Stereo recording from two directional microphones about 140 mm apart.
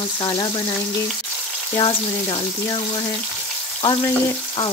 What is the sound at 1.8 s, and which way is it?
Frying, 35° left (ahead or behind).